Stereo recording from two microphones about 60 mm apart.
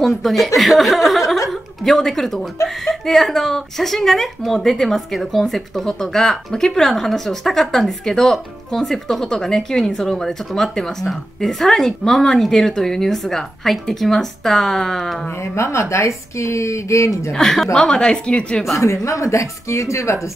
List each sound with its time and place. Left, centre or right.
0.0 s speech: centre
15.5 s speech: left
17.3 s a woman's voice: centre
18.8 s speech: left